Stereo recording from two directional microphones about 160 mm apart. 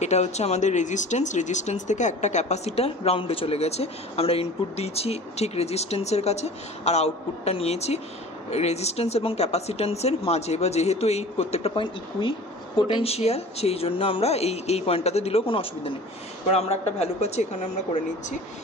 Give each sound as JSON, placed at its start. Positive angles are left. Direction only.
{"t": 0.0, "sound": "speech", "side_deg": 45}